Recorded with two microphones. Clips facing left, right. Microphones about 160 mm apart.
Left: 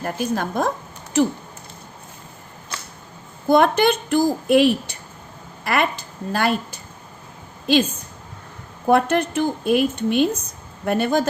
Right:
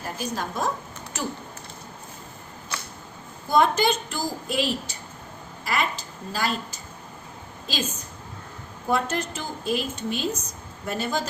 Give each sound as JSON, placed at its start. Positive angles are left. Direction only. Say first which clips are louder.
{"t": 0.0, "sound": "a woman's voice", "louder": "left 7 dB", "side_deg": 55}
{"t": 3.5, "sound": "a woman's voice", "louder": "left 5 dB", "side_deg": 60}
{"t": 8.9, "sound": "a woman's voice", "louder": "left 8 dB", "side_deg": 60}